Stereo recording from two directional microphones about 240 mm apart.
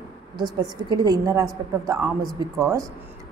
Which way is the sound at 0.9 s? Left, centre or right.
Centre.